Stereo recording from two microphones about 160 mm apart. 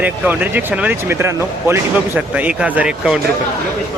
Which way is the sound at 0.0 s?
10° right (ahead or behind).